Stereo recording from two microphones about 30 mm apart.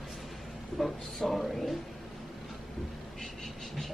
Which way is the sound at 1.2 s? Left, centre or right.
Centre.